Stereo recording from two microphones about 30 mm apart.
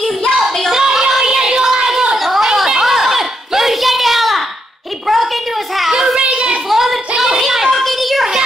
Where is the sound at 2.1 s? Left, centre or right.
Centre.